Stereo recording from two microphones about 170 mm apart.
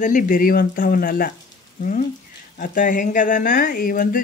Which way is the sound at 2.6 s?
50° left (ahead or behind).